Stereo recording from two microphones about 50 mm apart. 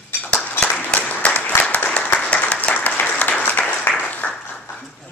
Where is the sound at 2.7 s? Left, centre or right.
Left.